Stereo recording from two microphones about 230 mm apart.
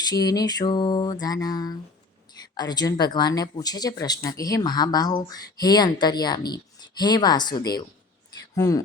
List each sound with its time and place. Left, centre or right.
0.0 s speech: centre